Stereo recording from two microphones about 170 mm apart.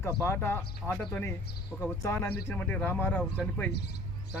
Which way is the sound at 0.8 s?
Centre (ahead or behind).